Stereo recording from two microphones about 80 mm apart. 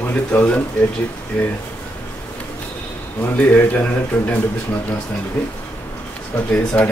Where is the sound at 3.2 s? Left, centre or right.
Left.